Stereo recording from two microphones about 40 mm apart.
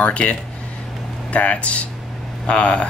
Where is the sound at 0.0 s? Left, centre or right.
Left.